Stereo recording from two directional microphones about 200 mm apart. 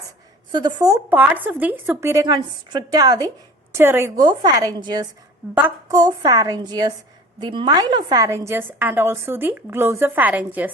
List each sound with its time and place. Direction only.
0.5 s a woman's voice: 20° right (ahead or behind)